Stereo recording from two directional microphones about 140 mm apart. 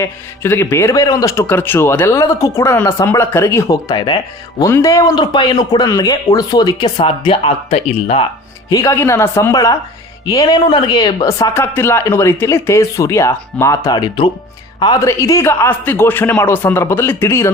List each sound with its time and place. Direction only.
0.0 s a man's voice: 15° left (ahead or behind); by 8.2 s 45° left (ahead or behind)
8.7 s a man's voice: 20° left (ahead or behind)